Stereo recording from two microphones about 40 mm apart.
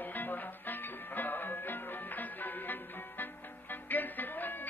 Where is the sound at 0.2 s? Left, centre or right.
Left.